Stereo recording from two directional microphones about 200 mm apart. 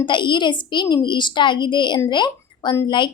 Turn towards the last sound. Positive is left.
turn(degrees=20)  # may be behind; listen again after turning